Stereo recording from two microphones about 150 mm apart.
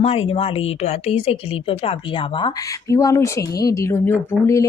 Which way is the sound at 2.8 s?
20° left (ahead or behind).